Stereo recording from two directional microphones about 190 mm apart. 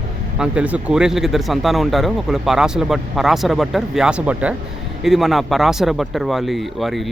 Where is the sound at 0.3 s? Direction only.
5° right (ahead or behind).